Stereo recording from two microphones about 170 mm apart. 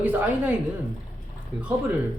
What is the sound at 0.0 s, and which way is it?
Speech, 10° right (ahead or behind).